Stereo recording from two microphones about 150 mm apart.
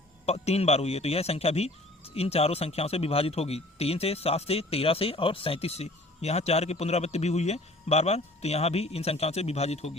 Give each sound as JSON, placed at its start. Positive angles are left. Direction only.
{"t": 0.3, "sound": "speech", "side_deg": 45}